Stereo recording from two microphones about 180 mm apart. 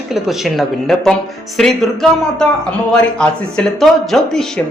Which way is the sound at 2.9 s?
5° left (ahead or behind).